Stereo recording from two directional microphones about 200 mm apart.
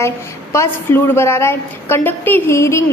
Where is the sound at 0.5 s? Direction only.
10° left (ahead or behind).